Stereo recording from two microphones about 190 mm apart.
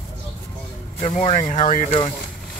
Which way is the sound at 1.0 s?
35° left (ahead or behind).